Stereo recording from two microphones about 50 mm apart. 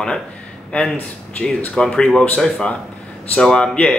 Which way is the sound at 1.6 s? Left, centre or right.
Centre.